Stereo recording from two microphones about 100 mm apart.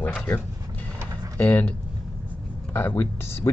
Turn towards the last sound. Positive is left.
turn(degrees=25)  # may be behind; listen again after turning